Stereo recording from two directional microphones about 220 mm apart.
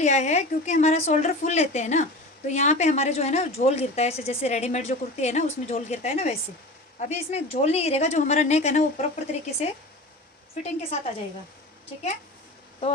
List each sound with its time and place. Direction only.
0.0 s a woman's voice: 30° left (ahead or behind)
10.6 s speech: 30° left (ahead or behind)